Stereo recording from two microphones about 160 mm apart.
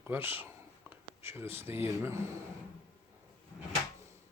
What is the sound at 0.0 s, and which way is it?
Speech, 10° right (ahead or behind).